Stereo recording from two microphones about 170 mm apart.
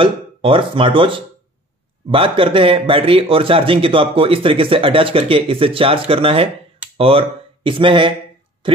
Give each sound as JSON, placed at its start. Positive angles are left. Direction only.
{"t": 0.0, "sound": "a man's voice", "side_deg": -30}